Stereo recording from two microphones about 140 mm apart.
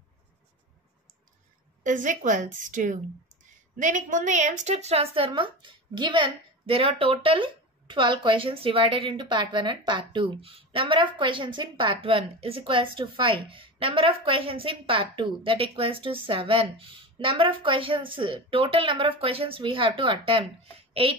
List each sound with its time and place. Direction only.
1.8 s a woman's voice: 65° right (ahead or behind); by 21.1 s 40° right (ahead or behind)